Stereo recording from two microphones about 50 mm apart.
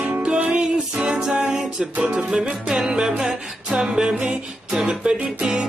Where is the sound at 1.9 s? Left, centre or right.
Right.